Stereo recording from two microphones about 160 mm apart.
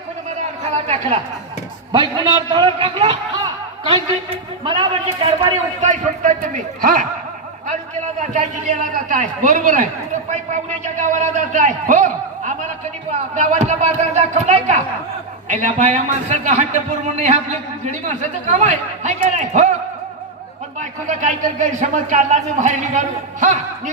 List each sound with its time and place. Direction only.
1.9 s a man's voice: 30° right (ahead or behind)
3.4 s a sound: 35° right (ahead or behind)
4.6 s a man's voice: 30° right (ahead or behind)
5.8 s a man's voice: 50° right (ahead or behind)
20.7 s a man's voice: 50° right (ahead or behind)